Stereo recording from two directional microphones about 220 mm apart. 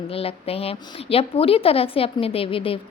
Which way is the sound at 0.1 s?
25° left (ahead or behind).